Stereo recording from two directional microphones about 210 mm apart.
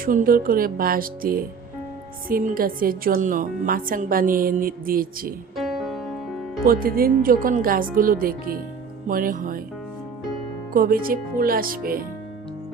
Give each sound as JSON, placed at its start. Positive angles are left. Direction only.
{"t": 0.0, "sound": "a woman's voice", "side_deg": -40}
{"t": 5.5, "sound": "music", "side_deg": 0}
{"t": 6.7, "sound": "a woman's voice", "side_deg": -45}
{"t": 9.0, "sound": "music", "side_deg": -40}
{"t": 10.8, "sound": "a woman's voice", "side_deg": -45}